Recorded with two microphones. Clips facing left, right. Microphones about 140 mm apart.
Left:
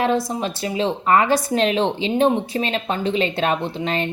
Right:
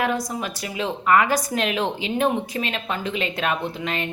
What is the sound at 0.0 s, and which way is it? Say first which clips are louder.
A woman's voice: left 4 dB; 30° left (ahead or behind).